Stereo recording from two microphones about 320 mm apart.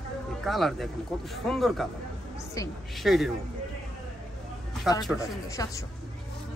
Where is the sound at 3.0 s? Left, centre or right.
Centre.